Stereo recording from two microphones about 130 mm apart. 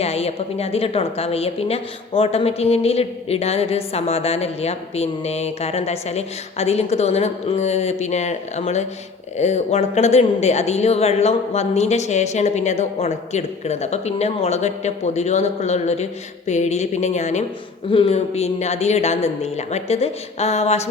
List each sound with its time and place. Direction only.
0.0 s a woman's voice: 55° left (ahead or behind)
17.9 s a woman's voice: 50° left (ahead or behind)